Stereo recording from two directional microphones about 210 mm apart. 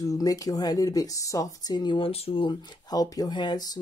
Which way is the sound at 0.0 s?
15° left (ahead or behind).